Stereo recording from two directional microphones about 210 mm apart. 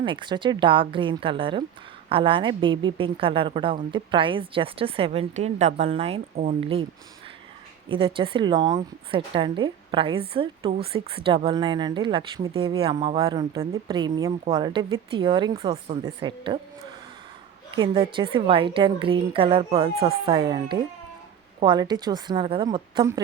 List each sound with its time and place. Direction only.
0.0 s a woman's voice: 20° right (ahead or behind)
7.9 s a woman's voice: 25° right (ahead or behind)
17.7 s a woman's voice: 25° right (ahead or behind)